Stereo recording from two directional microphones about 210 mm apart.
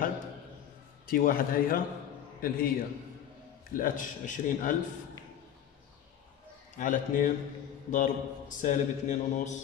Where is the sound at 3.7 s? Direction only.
40° left (ahead or behind).